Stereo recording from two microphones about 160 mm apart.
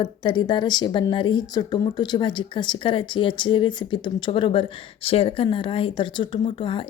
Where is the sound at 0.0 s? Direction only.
30° left (ahead or behind).